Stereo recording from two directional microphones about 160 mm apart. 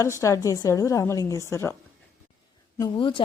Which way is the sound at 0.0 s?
20° left (ahead or behind).